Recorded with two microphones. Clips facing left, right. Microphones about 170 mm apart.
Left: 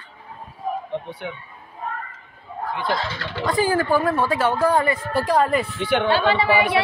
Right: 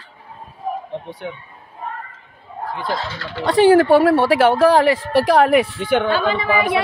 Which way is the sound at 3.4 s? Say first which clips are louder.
Right 9 dB; 75° right (ahead or behind).